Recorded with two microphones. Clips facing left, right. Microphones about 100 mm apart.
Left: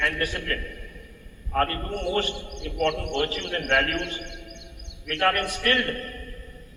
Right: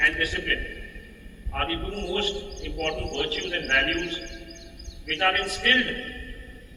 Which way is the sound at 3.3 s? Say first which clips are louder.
Left 1 dB; 30° left (ahead or behind).